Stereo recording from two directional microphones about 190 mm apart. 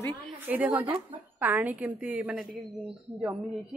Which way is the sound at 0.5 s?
10° right (ahead or behind).